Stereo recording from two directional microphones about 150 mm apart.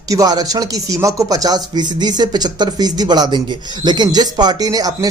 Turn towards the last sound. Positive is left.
turn(degrees=-25)  # may be behind; listen again after turning